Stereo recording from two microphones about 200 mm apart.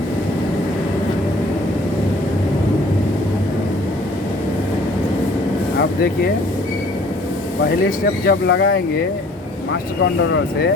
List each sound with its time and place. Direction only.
8.3 s speech: 60° left (ahead or behind)